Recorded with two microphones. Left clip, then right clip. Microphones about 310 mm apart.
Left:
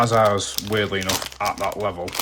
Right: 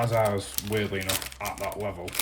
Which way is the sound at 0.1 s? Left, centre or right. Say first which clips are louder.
Left 8 dB; centre.